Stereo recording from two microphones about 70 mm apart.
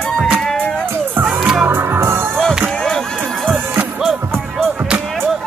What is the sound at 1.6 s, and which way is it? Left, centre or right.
Music, right.